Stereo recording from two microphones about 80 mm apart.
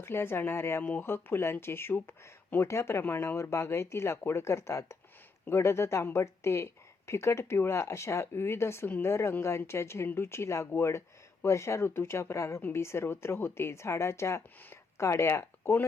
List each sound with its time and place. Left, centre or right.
0.0 s speech: left